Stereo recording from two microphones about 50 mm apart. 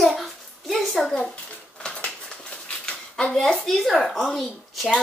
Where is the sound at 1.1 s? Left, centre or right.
Centre.